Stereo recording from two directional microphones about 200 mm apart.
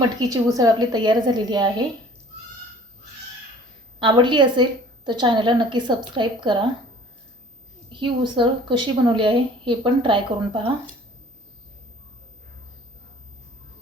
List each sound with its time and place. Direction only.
0.2 s a woman's voice: 20° right (ahead or behind)
4.0 s a woman's voice: 25° right (ahead or behind)
7.9 s a woman's voice: 25° right (ahead or behind)